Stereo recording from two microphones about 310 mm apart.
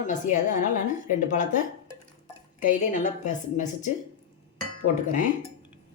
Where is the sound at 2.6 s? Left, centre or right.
Left.